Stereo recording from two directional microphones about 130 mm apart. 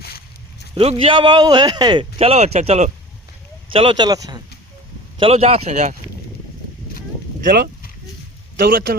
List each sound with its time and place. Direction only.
0.8 s a man's voice: 45° right (ahead or behind)
2.1 s speech: 50° right (ahead or behind)
3.7 s a man's voice: 40° right (ahead or behind)
5.2 s speech: 50° right (ahead or behind)
8.5 s a man's voice: 90° right